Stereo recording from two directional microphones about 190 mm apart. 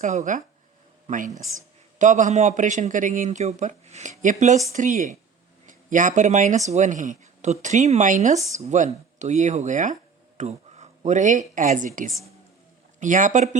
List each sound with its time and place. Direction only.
0.0 s speech: 40° right (ahead or behind)